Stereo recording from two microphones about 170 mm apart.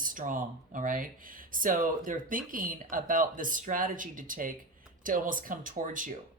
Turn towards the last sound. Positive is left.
turn(degrees=-50)  # may be behind; listen again after turning